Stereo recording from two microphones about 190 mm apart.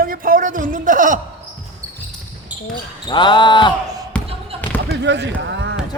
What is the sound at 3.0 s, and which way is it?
Speech, 25° left (ahead or behind).